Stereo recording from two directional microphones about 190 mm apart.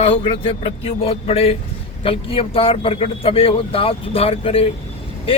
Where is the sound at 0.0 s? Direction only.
30° left (ahead or behind).